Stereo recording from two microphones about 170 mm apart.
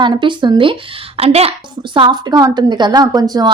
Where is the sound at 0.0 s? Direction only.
25° right (ahead or behind).